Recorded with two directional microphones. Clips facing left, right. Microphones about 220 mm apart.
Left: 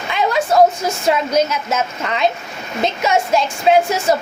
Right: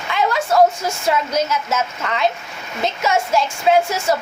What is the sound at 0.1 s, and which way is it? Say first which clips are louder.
A woman's voice: left 2 dB; 20° left (ahead or behind).